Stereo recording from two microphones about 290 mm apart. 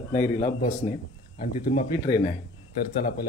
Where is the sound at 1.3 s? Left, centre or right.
Left.